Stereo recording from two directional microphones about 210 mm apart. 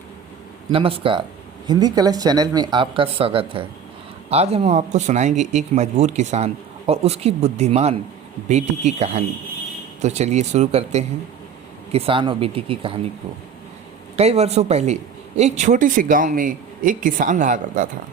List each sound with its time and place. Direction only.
0.7 s speech: 25° right (ahead or behind)
14.2 s speech: 30° right (ahead or behind)